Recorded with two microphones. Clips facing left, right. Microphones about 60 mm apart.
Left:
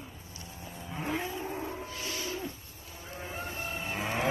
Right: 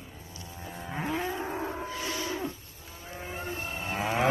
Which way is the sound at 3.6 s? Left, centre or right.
Right.